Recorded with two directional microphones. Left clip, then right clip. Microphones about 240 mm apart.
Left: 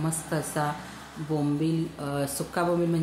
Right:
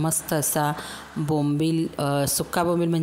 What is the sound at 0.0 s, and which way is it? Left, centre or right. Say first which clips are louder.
A woman's voice: right 5 dB; right.